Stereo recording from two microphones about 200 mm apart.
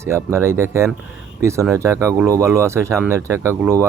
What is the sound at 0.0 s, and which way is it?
Speech, 15° right (ahead or behind).